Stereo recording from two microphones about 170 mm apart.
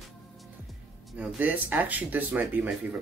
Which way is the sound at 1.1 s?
10° right (ahead or behind).